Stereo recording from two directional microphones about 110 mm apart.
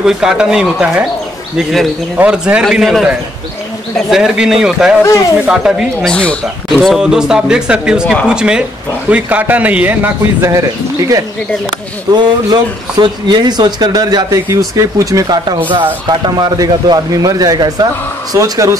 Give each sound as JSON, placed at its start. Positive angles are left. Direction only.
{"t": 0.0, "sound": "speech", "side_deg": -5}
{"t": 2.1, "sound": "speech", "side_deg": -10}
{"t": 6.0, "sound": "speech", "side_deg": 10}
{"t": 6.8, "sound": "speech", "side_deg": 0}
{"t": 12.1, "sound": "speech", "side_deg": -40}